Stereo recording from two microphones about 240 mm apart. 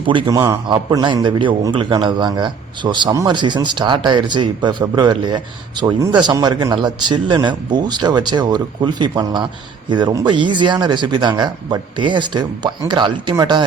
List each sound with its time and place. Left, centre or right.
0.0 s a man's voice: right